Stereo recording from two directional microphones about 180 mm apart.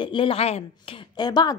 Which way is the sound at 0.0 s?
30° left (ahead or behind).